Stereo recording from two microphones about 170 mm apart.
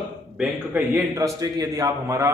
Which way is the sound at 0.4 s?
5° right (ahead or behind).